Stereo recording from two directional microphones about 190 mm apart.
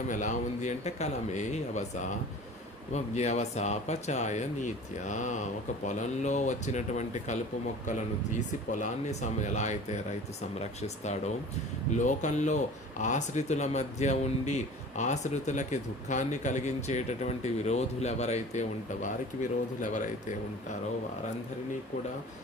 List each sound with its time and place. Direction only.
0.1 s speech: 40° left (ahead or behind)
8.7 s speech: 40° left (ahead or behind)